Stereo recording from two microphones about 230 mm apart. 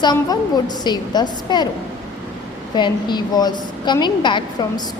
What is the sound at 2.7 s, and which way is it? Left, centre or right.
A woman's voice, centre.